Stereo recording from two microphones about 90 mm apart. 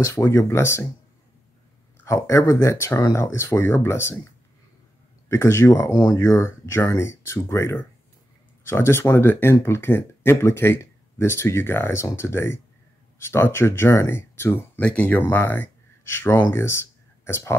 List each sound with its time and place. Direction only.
0.0 s speech: 30° left (ahead or behind)
2.2 s speech: 35° left (ahead or behind)
5.3 s speech: 30° left (ahead or behind)